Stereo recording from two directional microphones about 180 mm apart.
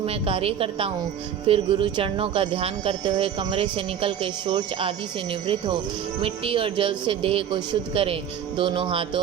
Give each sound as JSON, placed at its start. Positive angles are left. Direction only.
{"t": 0.0, "sound": "a woman's voice", "side_deg": -30}